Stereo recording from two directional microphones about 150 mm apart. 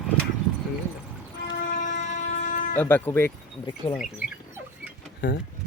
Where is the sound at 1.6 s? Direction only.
60° left (ahead or behind).